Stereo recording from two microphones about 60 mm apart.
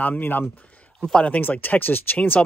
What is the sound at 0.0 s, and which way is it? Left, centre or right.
A man's voice, left.